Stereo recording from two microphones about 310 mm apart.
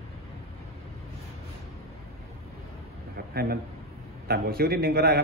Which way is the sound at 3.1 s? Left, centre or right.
Right.